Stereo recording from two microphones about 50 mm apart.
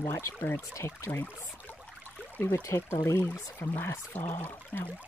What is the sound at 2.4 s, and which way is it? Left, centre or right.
Speech, left.